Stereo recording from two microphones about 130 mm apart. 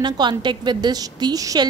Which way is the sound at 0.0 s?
35° right (ahead or behind).